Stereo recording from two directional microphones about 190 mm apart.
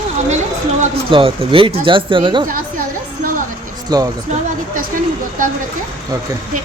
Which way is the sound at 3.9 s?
20° right (ahead or behind).